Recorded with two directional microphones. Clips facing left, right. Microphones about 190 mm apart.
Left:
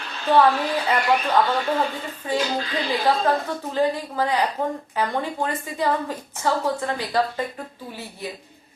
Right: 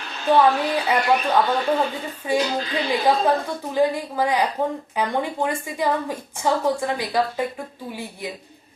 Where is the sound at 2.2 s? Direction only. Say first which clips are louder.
Right 3 dB; 10° right (ahead or behind).